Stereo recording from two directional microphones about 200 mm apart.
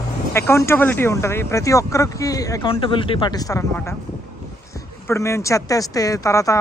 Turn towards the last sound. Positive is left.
turn(degrees=15)  # may be behind; listen again after turning